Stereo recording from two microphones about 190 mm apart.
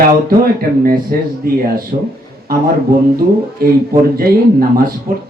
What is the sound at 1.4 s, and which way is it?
Speech, 50° right (ahead or behind).